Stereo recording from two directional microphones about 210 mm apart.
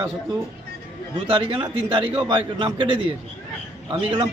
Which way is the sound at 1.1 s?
25° right (ahead or behind).